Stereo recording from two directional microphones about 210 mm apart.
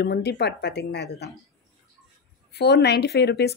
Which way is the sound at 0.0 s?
50° left (ahead or behind).